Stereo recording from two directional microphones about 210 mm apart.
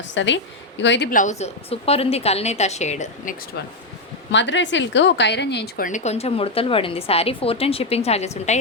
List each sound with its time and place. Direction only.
0.0 s a woman's voice: 60° left (ahead or behind)
1.1 s a woman's voice: 35° left (ahead or behind)
4.3 s a woman's voice: 60° left (ahead or behind); by 8.5 s 30° left (ahead or behind)